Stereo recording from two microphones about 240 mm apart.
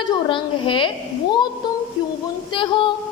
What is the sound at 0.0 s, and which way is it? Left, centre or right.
Speech, centre.